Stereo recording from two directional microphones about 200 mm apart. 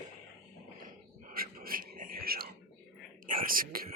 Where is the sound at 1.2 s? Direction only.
45° right (ahead or behind).